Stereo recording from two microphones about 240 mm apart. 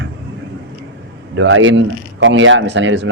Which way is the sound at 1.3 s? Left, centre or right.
Right.